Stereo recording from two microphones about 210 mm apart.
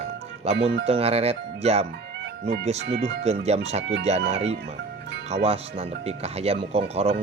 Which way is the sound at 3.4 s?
30° right (ahead or behind).